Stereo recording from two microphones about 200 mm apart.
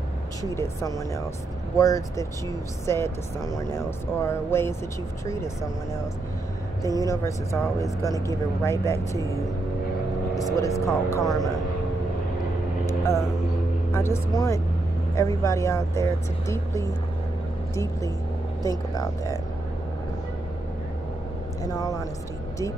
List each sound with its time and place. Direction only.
0.4 s speech: 15° left (ahead or behind)
6.8 s speech: 15° left (ahead or behind)
10.4 s speech: 15° left (ahead or behind)
12.8 s speech: 15° left (ahead or behind)
18.6 s speech: 15° left (ahead or behind)
21.7 s speech: 15° left (ahead or behind)